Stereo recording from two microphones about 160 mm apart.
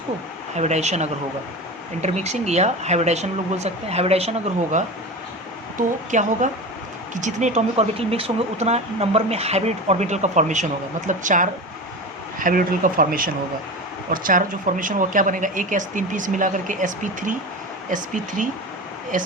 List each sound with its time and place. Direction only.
0.5 s speech: 45° right (ahead or behind)
6.1 s speech: 50° right (ahead or behind)